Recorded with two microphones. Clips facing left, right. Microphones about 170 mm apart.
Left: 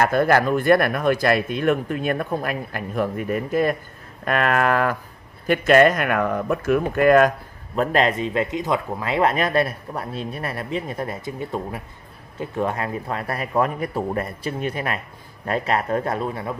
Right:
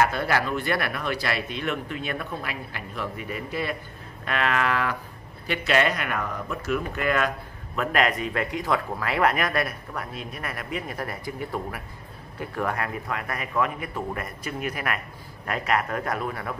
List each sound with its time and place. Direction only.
0.0 s speech: 50° left (ahead or behind); by 16.5 s 25° left (ahead or behind)